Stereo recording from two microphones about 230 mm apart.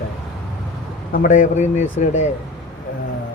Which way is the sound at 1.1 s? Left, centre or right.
Left.